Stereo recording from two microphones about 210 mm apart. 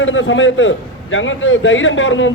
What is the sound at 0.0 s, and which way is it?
A man's voice, 65° left (ahead or behind).